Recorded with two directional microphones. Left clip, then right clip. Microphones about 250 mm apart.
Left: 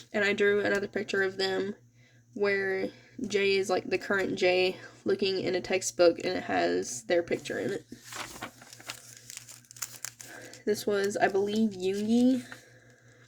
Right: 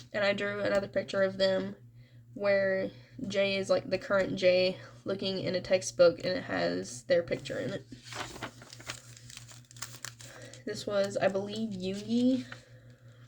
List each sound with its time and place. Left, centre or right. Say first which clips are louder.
0.1 s speech: left 4 dB; left
9.8 s crumpling: left 2 dB; centre
10.7 s speech: left 3 dB; left